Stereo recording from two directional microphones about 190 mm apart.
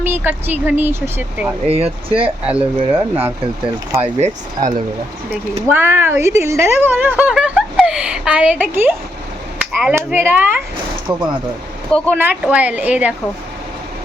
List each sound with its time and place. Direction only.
0.0 s speech: 10° right (ahead or behind)
1.6 s speech: 30° right (ahead or behind)
2.2 s speech: 5° right (ahead or behind)
4.0 s speech: 35° right (ahead or behind)
5.6 s speech: 10° right (ahead or behind)
11.1 s speech: 25° right (ahead or behind)
11.9 s speech: 5° left (ahead or behind)
12.1 s speech: 10° right (ahead or behind)